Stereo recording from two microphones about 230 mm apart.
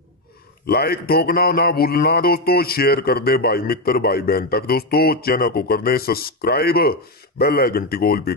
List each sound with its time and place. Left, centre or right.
0.7 s speech: left